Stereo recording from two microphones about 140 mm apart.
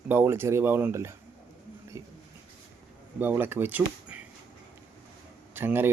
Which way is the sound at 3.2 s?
15° right (ahead or behind).